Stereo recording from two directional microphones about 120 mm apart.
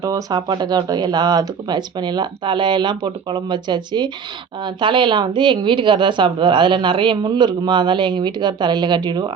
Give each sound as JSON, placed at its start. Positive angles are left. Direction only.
{"t": 0.0, "sound": "a woman's voice", "side_deg": -30}